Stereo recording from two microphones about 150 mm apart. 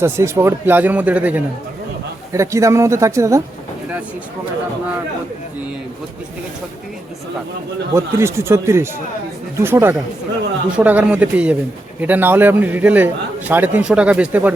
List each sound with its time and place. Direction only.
0.0 s a man's voice: 20° right (ahead or behind)
7.9 s a man's voice: 15° right (ahead or behind)